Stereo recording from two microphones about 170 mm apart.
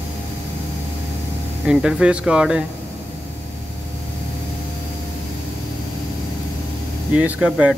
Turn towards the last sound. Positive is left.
turn(degrees=-5)  # may be behind; listen again after turning